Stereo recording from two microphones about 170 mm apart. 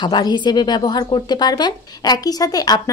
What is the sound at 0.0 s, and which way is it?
A woman's voice, 25° left (ahead or behind).